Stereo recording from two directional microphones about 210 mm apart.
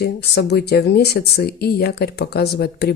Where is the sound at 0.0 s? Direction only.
50° left (ahead or behind).